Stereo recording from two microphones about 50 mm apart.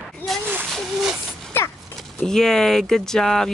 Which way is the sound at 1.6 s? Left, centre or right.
Left.